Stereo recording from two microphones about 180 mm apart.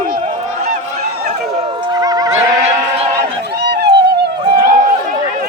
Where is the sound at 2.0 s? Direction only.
20° right (ahead or behind).